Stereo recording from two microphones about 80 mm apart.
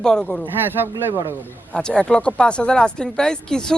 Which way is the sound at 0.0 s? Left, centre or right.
Centre.